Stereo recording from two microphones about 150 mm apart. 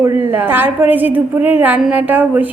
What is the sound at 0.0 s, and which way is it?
A woman's voice, 15° right (ahead or behind).